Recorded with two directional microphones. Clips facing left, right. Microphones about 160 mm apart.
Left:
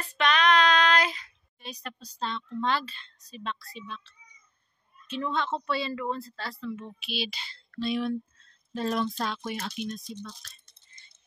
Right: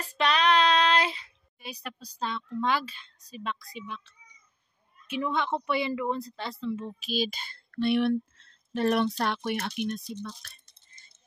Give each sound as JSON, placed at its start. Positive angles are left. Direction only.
{"t": 0.0, "sound": "female singing", "side_deg": -35}
{"t": 1.6, "sound": "speech", "side_deg": -10}
{"t": 6.6, "sound": "speech", "side_deg": -30}
{"t": 7.0, "sound": "speech", "side_deg": -45}